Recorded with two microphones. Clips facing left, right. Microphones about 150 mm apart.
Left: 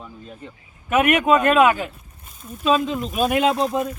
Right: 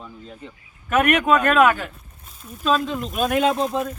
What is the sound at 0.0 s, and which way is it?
Speech, 5° left (ahead or behind).